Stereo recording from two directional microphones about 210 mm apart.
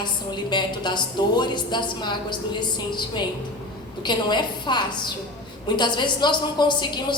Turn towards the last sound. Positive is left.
turn(degrees=20)  # may be behind; listen again after turning